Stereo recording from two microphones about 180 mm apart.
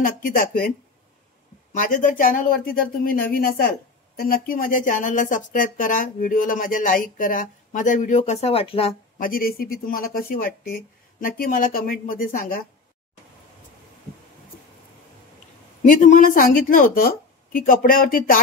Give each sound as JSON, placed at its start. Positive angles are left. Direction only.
{"t": 0.0, "sound": "speech", "side_deg": 50}
{"t": 1.7, "sound": "speech", "side_deg": 45}
{"t": 9.2, "sound": "speech", "side_deg": 55}
{"t": 15.8, "sound": "speech", "side_deg": 45}